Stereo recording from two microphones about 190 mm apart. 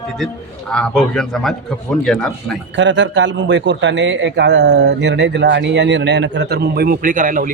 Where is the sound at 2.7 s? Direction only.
75° right (ahead or behind).